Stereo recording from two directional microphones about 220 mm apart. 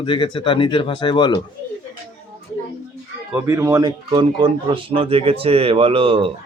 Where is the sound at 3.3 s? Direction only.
10° right (ahead or behind).